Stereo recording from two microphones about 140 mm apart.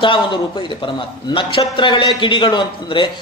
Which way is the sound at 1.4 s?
35° left (ahead or behind).